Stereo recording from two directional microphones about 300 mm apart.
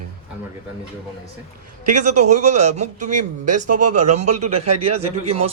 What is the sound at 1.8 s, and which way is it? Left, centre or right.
A man's voice, right.